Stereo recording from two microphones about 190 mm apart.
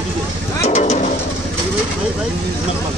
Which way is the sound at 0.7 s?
35° left (ahead or behind).